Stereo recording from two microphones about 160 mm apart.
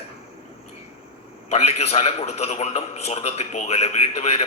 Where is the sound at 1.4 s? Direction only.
40° left (ahead or behind).